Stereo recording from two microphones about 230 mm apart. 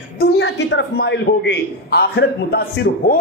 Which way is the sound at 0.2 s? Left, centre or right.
Left.